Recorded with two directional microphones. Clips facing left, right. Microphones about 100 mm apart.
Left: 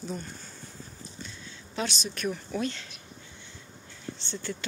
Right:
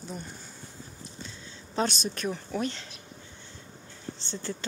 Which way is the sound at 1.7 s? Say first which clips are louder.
Right 4 dB; 45° right (ahead or behind).